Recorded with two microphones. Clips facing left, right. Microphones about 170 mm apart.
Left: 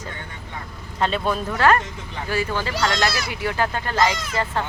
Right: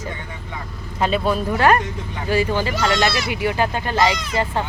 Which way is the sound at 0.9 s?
10° right (ahead or behind).